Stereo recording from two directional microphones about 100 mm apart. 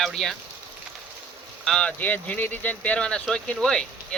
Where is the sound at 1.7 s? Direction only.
5° left (ahead or behind).